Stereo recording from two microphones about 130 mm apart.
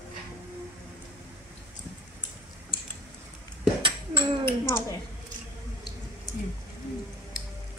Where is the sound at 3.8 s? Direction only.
40° right (ahead or behind).